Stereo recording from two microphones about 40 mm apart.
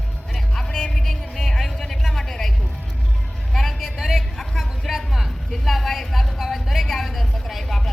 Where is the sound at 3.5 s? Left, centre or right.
Centre.